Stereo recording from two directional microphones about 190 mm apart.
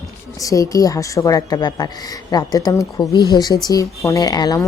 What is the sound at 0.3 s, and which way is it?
A woman's voice, 15° left (ahead or behind).